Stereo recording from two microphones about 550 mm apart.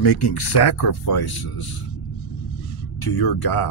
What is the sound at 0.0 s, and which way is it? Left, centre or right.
Speech, left.